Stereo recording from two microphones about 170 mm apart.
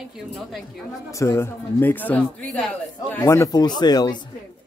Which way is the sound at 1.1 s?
15° left (ahead or behind).